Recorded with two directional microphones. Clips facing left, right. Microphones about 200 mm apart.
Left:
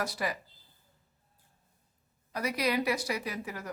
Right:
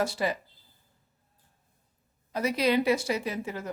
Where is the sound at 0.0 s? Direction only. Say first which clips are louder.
Right 5 dB; 25° right (ahead or behind).